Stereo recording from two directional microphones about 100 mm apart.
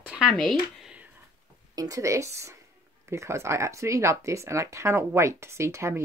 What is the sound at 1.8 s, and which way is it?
Speech, 35° right (ahead or behind).